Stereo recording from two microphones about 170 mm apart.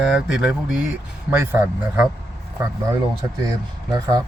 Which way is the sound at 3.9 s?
20° right (ahead or behind).